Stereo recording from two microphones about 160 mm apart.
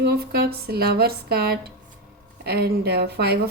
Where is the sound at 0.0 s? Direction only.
70° right (ahead or behind).